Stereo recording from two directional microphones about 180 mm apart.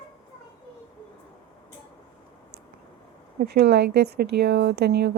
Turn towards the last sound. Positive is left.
turn(degrees=-65)  # may be behind; listen again after turning